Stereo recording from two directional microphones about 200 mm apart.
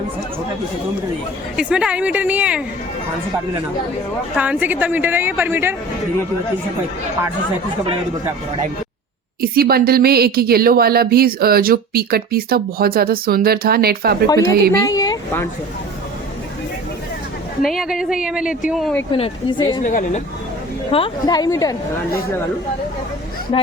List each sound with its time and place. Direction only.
1.5 s a woman's voice: 5° right (ahead or behind)
4.4 s a woman's voice: 10° right (ahead or behind)
9.4 s speech: 50° right (ahead or behind)
14.3 s a woman's voice: 15° left (ahead or behind)
17.6 s a woman's voice: centre (ahead or behind)
19.1 s a woman's voice: 25° left (ahead or behind)
19.8 s a woman's voice: 40° left (ahead or behind)
20.9 s a woman's voice: 25° left (ahead or behind)